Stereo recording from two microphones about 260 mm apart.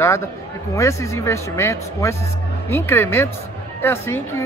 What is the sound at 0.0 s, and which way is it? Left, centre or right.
Speech, centre.